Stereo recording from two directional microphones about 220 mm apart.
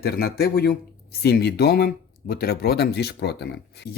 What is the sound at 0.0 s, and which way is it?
Speech, 45° left (ahead or behind).